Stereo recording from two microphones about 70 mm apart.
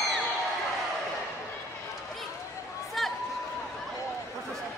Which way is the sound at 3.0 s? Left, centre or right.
Centre.